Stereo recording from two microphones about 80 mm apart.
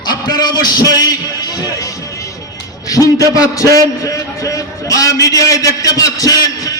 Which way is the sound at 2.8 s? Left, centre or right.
Left.